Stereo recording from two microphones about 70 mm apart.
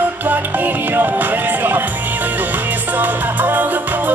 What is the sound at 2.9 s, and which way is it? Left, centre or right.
Music, right.